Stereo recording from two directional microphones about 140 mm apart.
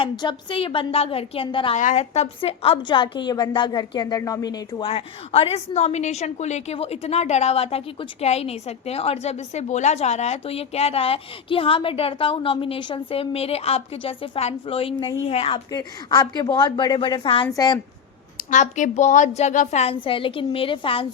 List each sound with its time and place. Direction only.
0.0 s a woman's voice: 35° left (ahead or behind)
1.7 s a woman's voice: 60° left (ahead or behind); by 4.5 s 25° left (ahead or behind)
4.8 s a woman's voice: 45° left (ahead or behind)
15.7 s a woman's voice: 30° left (ahead or behind)
18.5 s a woman's voice: 60° left (ahead or behind); by 21.1 s 40° left (ahead or behind)